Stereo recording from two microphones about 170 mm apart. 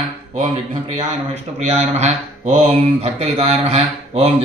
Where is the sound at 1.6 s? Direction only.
40° right (ahead or behind).